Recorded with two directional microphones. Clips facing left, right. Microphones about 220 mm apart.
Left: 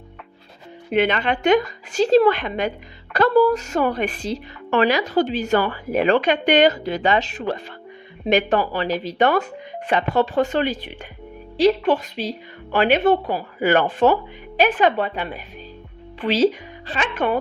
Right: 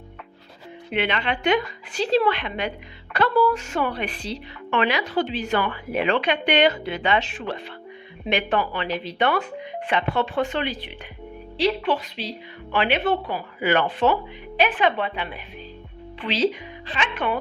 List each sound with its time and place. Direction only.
0.9 s a woman's voice: 45° left (ahead or behind)